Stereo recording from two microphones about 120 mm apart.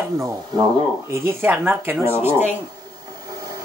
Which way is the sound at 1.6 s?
10° right (ahead or behind).